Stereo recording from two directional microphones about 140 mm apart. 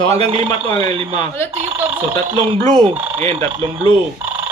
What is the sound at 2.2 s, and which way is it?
Speech, 40° right (ahead or behind).